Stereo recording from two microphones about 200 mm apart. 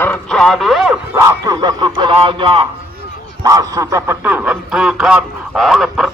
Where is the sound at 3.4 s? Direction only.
15° right (ahead or behind).